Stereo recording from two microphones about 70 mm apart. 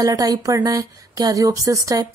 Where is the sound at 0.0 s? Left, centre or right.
Right.